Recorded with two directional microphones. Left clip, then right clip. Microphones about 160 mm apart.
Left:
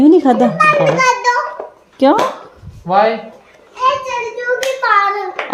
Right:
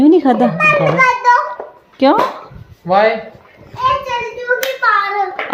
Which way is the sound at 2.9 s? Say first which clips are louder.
Even; 45° right (ahead or behind).